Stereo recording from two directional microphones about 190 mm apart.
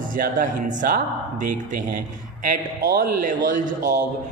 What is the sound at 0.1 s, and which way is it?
Speech, 45° right (ahead or behind).